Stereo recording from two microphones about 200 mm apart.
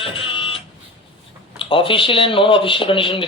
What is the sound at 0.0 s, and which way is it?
Printer, 25° left (ahead or behind).